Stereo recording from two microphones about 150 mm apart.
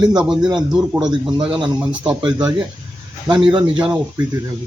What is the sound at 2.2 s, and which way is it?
Speech, 25° right (ahead or behind).